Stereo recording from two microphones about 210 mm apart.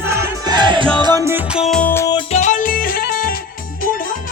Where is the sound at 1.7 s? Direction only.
5° left (ahead or behind); by 4.1 s 40° left (ahead or behind).